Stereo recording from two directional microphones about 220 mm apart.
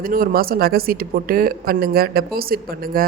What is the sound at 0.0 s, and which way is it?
A woman's voice, 40° right (ahead or behind).